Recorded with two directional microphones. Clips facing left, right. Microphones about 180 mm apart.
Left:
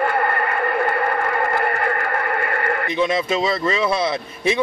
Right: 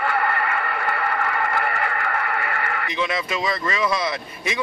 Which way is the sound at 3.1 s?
25° left (ahead or behind).